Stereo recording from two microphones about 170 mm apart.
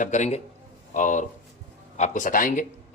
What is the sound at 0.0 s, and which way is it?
Speech, 45° left (ahead or behind).